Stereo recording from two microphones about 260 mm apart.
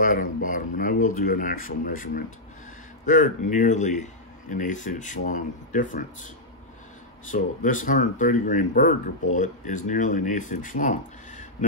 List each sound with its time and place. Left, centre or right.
0.0 s speech: left
7.2 s speech: left